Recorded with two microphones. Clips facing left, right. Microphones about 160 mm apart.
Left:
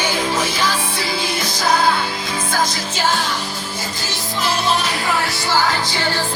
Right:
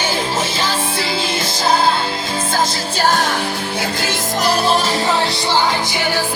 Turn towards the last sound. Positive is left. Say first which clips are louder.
# right 2 dB
turn(degrees=-15)  # may be behind; listen again after turning